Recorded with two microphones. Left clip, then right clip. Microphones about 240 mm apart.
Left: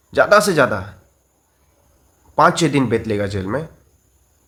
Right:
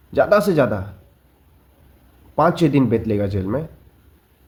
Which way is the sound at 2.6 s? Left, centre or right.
Left.